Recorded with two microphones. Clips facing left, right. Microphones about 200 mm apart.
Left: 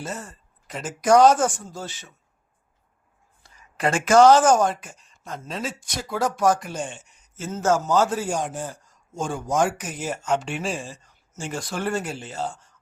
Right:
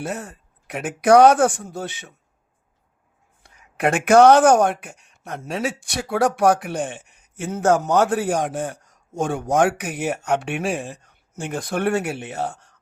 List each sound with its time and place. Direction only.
0.0 s a man's voice: 65° right (ahead or behind)
3.4 s a man's voice: 65° right (ahead or behind)